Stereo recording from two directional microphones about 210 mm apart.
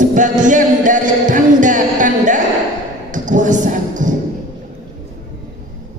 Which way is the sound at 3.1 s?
35° right (ahead or behind).